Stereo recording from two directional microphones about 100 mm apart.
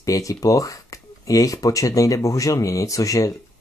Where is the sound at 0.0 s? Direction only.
35° left (ahead or behind).